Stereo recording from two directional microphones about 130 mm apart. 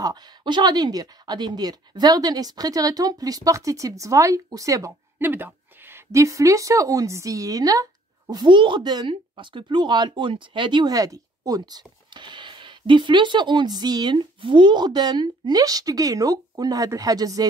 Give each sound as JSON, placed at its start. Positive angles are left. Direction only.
{"t": 0.0, "sound": "speech", "side_deg": -30}